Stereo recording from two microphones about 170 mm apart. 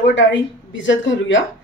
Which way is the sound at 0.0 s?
90° left.